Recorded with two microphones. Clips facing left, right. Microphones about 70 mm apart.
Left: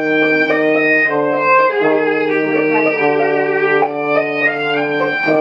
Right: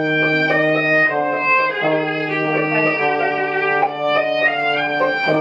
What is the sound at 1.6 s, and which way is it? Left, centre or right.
Violin, left.